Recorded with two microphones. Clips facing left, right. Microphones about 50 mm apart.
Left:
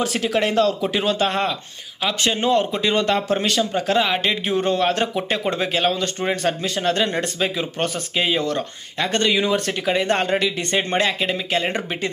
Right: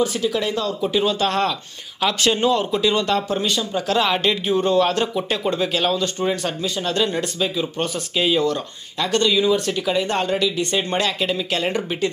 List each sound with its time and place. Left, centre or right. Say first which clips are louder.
0.0 s speech: even; left
1.2 s speech: right 1 dB; left
2.4 s speech: left 2 dB; left
3.3 s speech: left 2 dB; left
3.7 s speech: right 1 dB; left
4.0 s speech: right 1 dB; centre
4.5 s speech: right 2 dB; left